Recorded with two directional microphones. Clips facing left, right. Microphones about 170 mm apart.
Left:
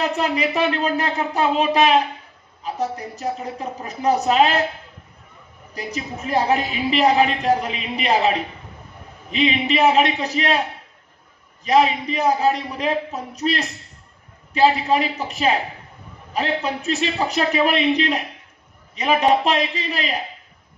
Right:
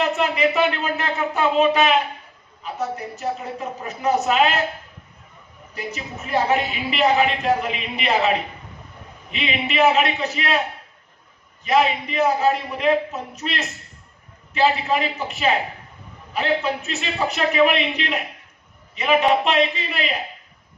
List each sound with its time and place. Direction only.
0.0 s speech: 35° left (ahead or behind)
6.2 s speech: 35° left (ahead or behind)
9.3 s speech: 35° left (ahead or behind)
11.6 s speech: 35° left (ahead or behind)